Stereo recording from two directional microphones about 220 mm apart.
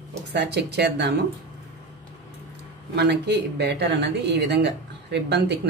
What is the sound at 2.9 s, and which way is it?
Speech, 50° right (ahead or behind).